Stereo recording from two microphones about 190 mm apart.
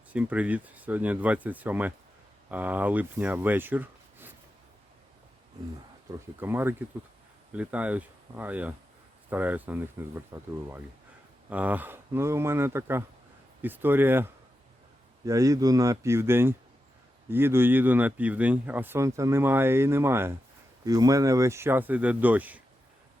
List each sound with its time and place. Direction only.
0.1 s speech: 5° right (ahead or behind)
6.1 s speech: 10° right (ahead or behind)